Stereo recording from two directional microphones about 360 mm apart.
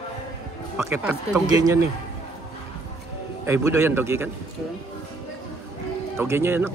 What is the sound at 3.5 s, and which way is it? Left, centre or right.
Speech, centre.